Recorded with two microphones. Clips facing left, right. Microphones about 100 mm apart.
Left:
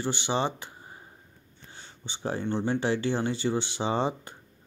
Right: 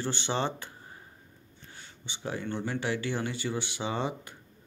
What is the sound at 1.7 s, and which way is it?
Speech, 30° left (ahead or behind).